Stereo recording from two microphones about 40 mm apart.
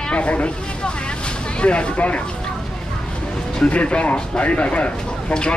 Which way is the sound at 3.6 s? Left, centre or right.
Left.